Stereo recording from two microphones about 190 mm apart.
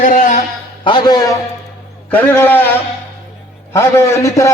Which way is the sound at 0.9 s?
25° left (ahead or behind).